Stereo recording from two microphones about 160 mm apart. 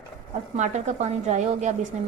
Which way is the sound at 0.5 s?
45° right (ahead or behind).